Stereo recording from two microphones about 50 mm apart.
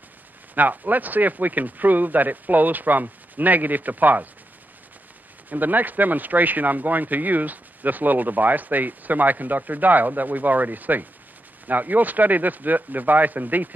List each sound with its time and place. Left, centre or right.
0.6 s speech: right
5.5 s speech: right